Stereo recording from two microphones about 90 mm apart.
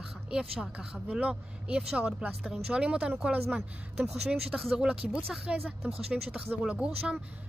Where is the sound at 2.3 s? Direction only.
5° right (ahead or behind).